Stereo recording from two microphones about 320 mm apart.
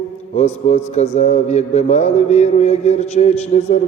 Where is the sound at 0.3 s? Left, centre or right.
Left.